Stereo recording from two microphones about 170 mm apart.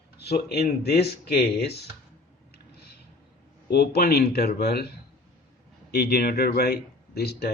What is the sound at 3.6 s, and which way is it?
Speech, 65° left (ahead or behind).